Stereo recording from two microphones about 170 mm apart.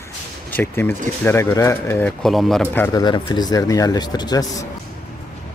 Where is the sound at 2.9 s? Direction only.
25° left (ahead or behind).